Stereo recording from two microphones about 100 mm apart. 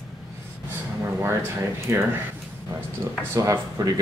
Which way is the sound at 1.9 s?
25° right (ahead or behind).